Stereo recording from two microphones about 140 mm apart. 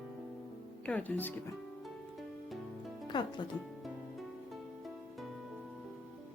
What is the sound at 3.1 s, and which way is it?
Speech, 30° left (ahead or behind).